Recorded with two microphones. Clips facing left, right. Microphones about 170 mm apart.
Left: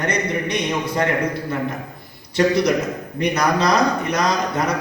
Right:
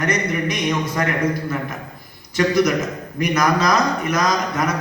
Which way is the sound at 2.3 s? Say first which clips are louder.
Even; 30° left (ahead or behind).